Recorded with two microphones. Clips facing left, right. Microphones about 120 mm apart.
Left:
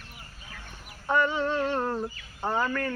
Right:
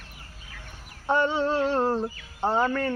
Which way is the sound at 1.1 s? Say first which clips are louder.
Right 2 dB; 30° right (ahead or behind).